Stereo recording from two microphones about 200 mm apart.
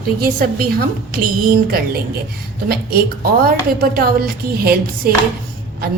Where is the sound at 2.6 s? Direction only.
50° right (ahead or behind).